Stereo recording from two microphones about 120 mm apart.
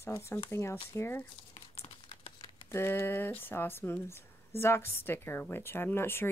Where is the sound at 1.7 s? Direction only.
55° left (ahead or behind).